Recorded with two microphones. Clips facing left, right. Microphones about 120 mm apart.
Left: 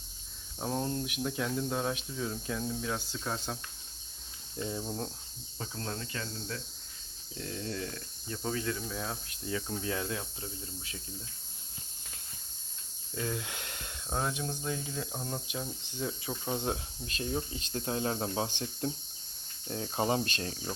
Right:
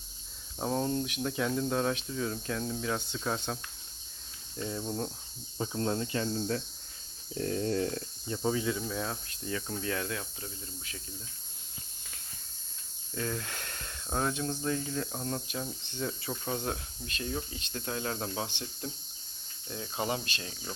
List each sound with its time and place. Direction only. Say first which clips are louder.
0.6 s speech: right 3 dB; centre (ahead or behind)
4.5 s speech: even; 15° left (ahead or behind)
4.8 s speech: right 2 dB; centre (ahead or behind)
5.5 s cricket: right 8 dB; 25° right (ahead or behind)
7.3 s a sound: right 8 dB; 40° right (ahead or behind)
8.3 s speech: right 4 dB; 20° right (ahead or behind); by 9.8 s 5° left (ahead or behind)
9.8 s speech: even; 20° left (ahead or behind)
13.1 s speech: right 1 dB; 15° left (ahead or behind)
16.6 s speech: left 1 dB; 20° left (ahead or behind)
18.4 s speech: left 5 dB; 40° left (ahead or behind)